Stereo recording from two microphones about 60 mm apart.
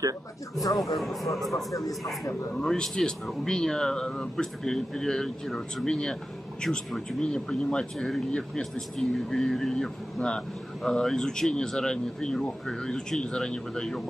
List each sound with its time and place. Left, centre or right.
0.6 s a man's voice: left
0.9 s speech: centre
1.5 s a man's voice: left
2.6 s speech: centre